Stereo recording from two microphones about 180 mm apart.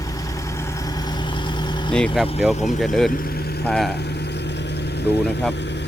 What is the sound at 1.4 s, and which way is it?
Vehicle, 25° left (ahead or behind).